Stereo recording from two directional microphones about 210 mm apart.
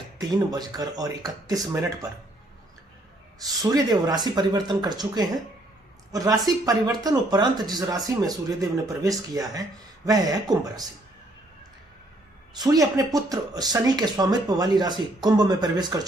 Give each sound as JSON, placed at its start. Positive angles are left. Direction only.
{"t": 0.2, "sound": "speech", "side_deg": -15}
{"t": 3.4, "sound": "speech", "side_deg": -15}
{"t": 12.5, "sound": "speech", "side_deg": -15}